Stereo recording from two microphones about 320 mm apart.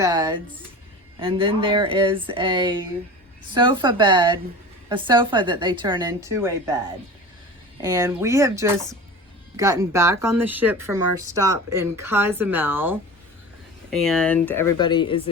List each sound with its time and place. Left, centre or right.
0.0 s a woman's voice: centre
7.8 s a woman's voice: centre